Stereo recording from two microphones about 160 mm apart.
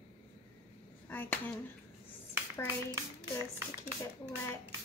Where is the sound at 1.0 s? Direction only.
10° left (ahead or behind).